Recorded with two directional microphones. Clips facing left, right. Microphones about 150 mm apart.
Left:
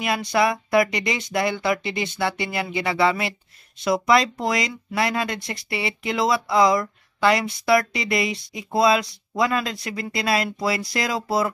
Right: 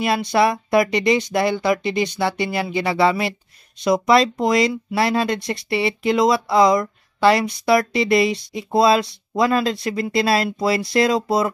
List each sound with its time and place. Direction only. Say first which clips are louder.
0.0 s speech: right 3 dB; 25° right (ahead or behind)